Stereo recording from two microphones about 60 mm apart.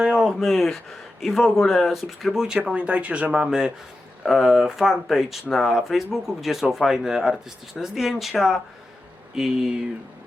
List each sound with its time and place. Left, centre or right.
0.0 s a sound: centre
0.3 s speech: centre
2.7 s speech: right
3.4 s speech: centre